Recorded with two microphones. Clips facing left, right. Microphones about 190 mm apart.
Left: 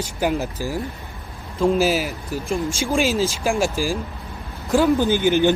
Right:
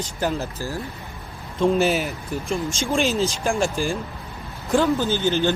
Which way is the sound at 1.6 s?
Centre (ahead or behind).